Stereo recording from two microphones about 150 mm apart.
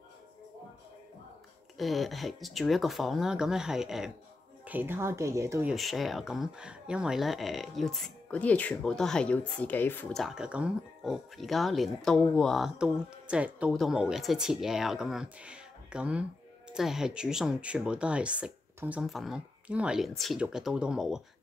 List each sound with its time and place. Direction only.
1.8 s speech: centre (ahead or behind)
4.6 s speech: 15° right (ahead or behind)
5.7 s speech: centre (ahead or behind)
10.1 s speech: centre (ahead or behind)